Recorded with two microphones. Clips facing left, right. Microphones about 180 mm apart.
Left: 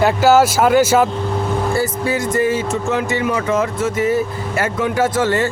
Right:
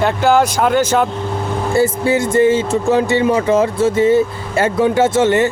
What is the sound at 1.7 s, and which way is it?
Speech, 25° right (ahead or behind).